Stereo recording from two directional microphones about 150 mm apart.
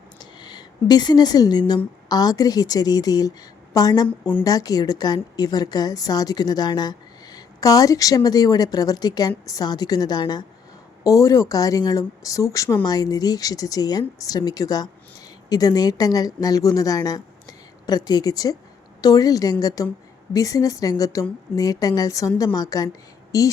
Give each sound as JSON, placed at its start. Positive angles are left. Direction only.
{"t": 0.2, "sound": "a woman's voice", "side_deg": 30}